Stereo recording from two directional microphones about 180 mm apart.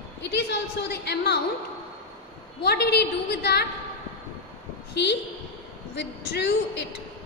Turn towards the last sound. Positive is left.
turn(degrees=75)  # may be behind; listen again after turning